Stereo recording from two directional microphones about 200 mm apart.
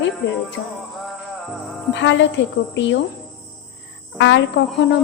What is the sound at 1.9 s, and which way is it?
A woman's voice, 65° left (ahead or behind).